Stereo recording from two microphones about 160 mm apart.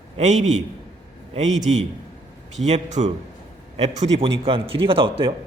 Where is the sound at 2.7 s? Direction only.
45° right (ahead or behind).